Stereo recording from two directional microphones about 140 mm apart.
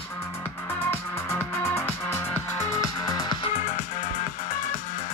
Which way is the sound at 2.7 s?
25° left (ahead or behind).